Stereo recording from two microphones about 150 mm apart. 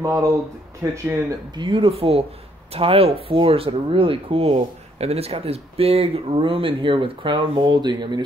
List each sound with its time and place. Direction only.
0.0 s speech: 20° right (ahead or behind)
1.5 s speech: 30° right (ahead or behind)